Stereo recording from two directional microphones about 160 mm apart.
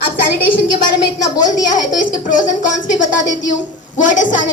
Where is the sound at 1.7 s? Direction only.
55° left (ahead or behind).